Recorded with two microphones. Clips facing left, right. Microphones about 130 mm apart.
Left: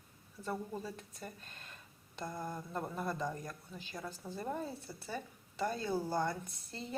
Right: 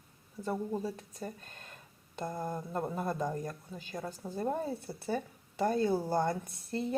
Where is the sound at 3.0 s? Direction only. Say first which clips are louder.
Right 4 dB; 45° right (ahead or behind).